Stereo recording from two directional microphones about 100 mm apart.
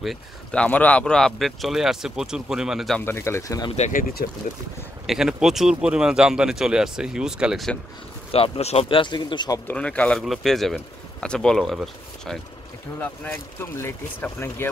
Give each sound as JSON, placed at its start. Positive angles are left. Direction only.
{"t": 0.5, "sound": "speech", "side_deg": 15}
{"t": 3.0, "sound": "speech", "side_deg": 20}
{"t": 5.0, "sound": "speech", "side_deg": -5}
{"t": 8.3, "sound": "speech", "side_deg": 85}
{"t": 9.7, "sound": "speech", "side_deg": 15}
{"t": 10.2, "sound": "speech", "side_deg": 0}
{"t": 13.0, "sound": "speech", "side_deg": 15}
{"t": 13.6, "sound": "speech", "side_deg": 25}